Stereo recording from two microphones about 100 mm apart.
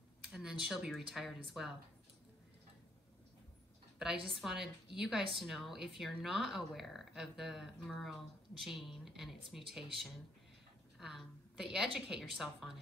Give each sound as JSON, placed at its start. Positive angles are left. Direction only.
{"t": 0.3, "sound": "speech", "side_deg": -5}
{"t": 4.3, "sound": "speech", "side_deg": 0}